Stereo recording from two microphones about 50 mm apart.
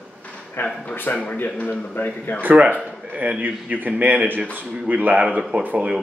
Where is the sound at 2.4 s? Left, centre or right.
Right.